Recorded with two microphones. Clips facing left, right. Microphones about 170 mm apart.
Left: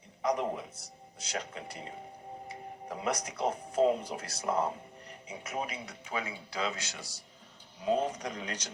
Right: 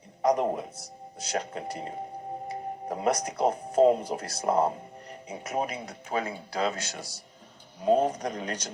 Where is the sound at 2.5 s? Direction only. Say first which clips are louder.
Right 7 dB; 45° right (ahead or behind).